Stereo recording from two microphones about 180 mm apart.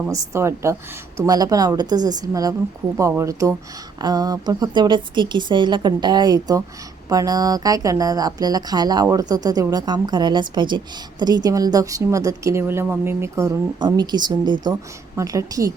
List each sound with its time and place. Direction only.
0.1 s a woman's voice: 15° right (ahead or behind)